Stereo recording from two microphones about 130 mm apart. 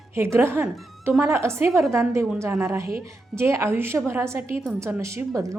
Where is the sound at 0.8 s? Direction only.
Centre (ahead or behind).